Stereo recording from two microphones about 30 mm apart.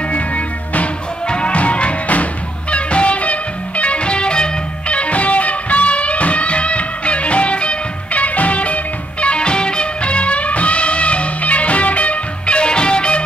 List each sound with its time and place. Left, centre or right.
1.2 s music: left